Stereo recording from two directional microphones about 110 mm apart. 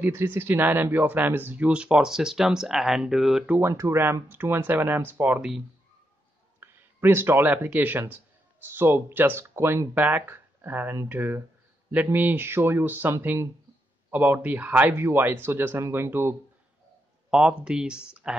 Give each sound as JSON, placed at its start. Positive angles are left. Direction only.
{"t": 0.0, "sound": "speech", "side_deg": -20}
{"t": 3.5, "sound": "speech", "side_deg": -25}
{"t": 6.6, "sound": "speech", "side_deg": -20}
{"t": 17.3, "sound": "speech", "side_deg": -10}